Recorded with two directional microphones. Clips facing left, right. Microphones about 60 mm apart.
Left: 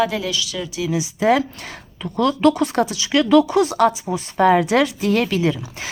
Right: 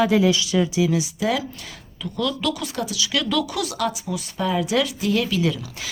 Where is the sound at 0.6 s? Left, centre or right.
Centre.